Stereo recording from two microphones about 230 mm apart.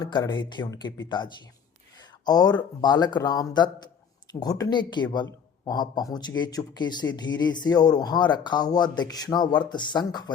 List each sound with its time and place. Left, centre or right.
0.0 s a man's voice: centre